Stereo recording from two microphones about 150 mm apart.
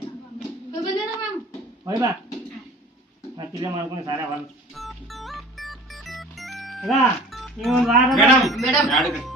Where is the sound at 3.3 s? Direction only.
30° right (ahead or behind).